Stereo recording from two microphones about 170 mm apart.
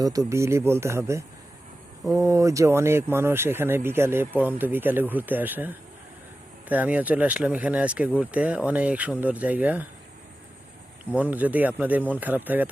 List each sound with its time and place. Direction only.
0.0 s speech: 20° right (ahead or behind)
11.1 s speech: 10° right (ahead or behind)